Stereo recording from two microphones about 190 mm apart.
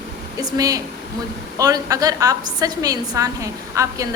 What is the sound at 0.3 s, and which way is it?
A woman's voice, 20° right (ahead or behind).